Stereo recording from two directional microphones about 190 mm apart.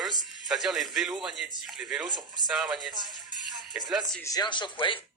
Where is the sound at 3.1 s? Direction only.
Centre (ahead or behind).